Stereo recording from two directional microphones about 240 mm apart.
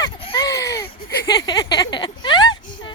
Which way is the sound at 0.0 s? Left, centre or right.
Centre.